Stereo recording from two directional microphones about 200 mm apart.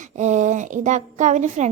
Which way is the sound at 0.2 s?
35° right (ahead or behind).